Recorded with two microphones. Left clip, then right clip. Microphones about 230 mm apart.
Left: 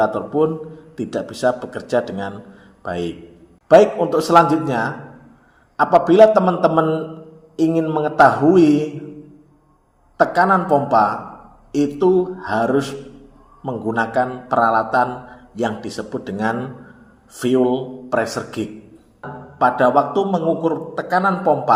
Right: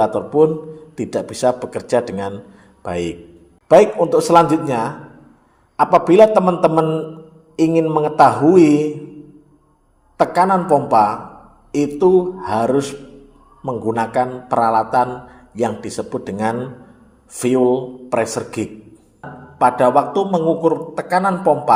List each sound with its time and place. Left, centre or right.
0.0 s a man's voice: right
10.2 s a man's voice: right